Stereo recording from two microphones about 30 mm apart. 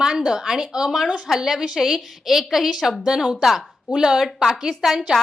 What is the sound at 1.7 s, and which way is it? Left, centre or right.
Speech, centre.